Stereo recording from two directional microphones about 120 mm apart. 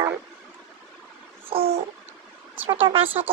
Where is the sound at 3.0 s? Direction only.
15° right (ahead or behind).